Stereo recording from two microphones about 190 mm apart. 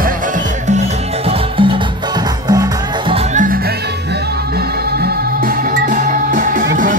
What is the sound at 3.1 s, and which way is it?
Music, 40° right (ahead or behind).